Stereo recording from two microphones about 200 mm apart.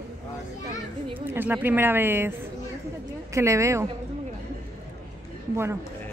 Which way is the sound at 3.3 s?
15° right (ahead or behind).